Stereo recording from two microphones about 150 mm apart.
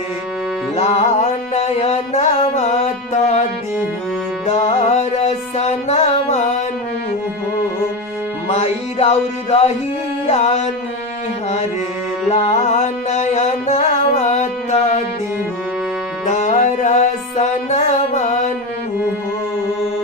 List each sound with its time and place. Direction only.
0.8 s music: 45° left (ahead or behind)
4.4 s music: 45° left (ahead or behind)
8.4 s music: 45° left (ahead or behind)
12.3 s music: 45° left (ahead or behind)
16.2 s music: 55° left (ahead or behind)